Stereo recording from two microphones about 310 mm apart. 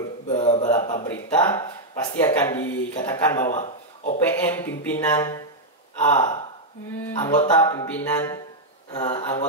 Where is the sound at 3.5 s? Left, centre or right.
Left.